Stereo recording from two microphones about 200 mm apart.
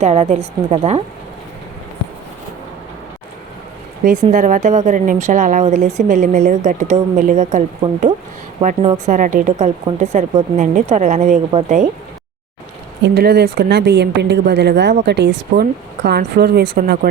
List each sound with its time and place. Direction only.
0.0 s a woman's voice: 35° right (ahead or behind)
4.0 s a woman's voice: 40° right (ahead or behind)
8.6 s a woman's voice: 30° right (ahead or behind)
13.0 s a woman's voice: 55° right (ahead or behind)